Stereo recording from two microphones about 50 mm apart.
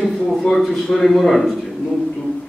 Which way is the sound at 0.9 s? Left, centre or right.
Centre.